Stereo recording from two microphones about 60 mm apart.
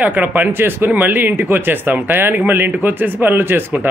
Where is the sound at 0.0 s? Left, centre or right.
Right.